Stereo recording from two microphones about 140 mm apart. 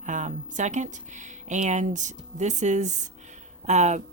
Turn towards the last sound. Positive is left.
turn(degrees=-55)  # may be behind; listen again after turning